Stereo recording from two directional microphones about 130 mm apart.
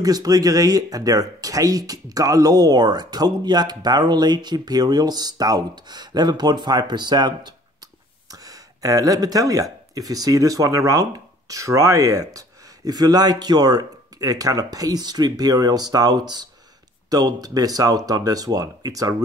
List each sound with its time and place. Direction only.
0.0 s speech: 30° right (ahead or behind)